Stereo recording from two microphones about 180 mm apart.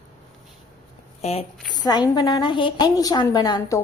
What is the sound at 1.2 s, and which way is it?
Speech, 35° left (ahead or behind).